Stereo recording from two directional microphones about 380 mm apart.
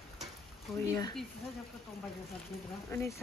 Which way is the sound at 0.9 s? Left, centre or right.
Centre.